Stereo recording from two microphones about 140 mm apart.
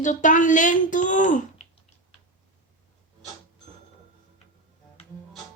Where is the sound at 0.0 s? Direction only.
65° left (ahead or behind).